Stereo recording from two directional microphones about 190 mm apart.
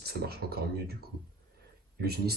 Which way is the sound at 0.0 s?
55° right (ahead or behind).